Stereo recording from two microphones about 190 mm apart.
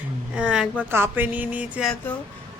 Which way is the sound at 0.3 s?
5° right (ahead or behind).